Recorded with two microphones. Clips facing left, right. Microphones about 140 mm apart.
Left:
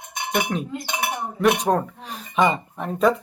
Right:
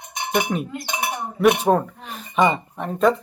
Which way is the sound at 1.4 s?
5° right (ahead or behind).